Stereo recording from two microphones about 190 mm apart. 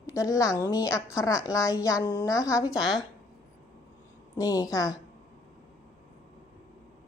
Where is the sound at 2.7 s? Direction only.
Centre (ahead or behind).